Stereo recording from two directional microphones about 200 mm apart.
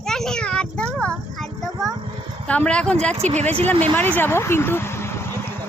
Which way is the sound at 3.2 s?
35° right (ahead or behind).